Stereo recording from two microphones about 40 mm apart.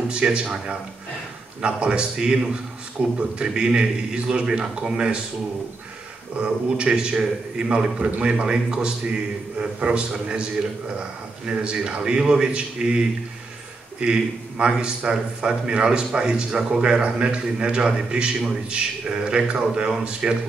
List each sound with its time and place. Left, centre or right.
0.1 s a man's voice: right
6.4 s a man's voice: right
11.4 s a man's voice: right